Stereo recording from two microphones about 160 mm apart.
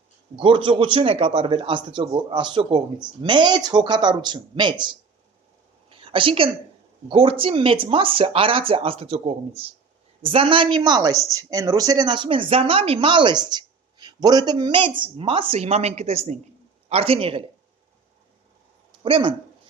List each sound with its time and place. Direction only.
0.3 s speech: 30° right (ahead or behind)
5.9 s a sound: 35° right (ahead or behind)
7.1 s a woman's voice: 35° right (ahead or behind)
19.0 s a woman's voice: 35° right (ahead or behind)